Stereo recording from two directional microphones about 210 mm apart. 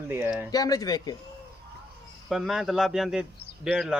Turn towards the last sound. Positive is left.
turn(degrees=-5)  # may be behind; listen again after turning